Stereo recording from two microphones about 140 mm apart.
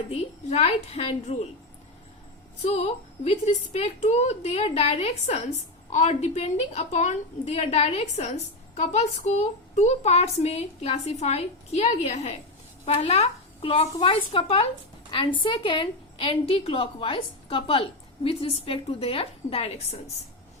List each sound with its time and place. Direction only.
0.1 s a woman's voice: 45° left (ahead or behind)
2.6 s a woman's voice: 50° left (ahead or behind)